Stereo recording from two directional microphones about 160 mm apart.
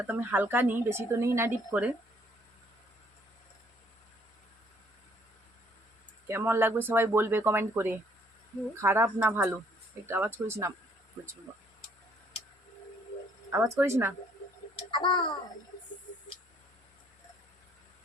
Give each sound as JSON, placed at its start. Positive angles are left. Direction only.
{"t": 0.0, "sound": "a woman's voice", "side_deg": -10}
{"t": 6.2, "sound": "a woman's voice", "side_deg": -15}
{"t": 13.5, "sound": "a woman's voice", "side_deg": -15}
{"t": 14.8, "sound": "a child's voice", "side_deg": 30}